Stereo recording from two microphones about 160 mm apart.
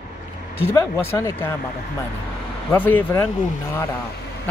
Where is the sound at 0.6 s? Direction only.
15° left (ahead or behind).